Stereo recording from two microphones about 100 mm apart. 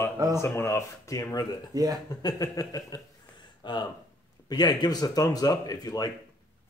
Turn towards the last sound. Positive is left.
turn(degrees=40)  # may be behind; listen again after turning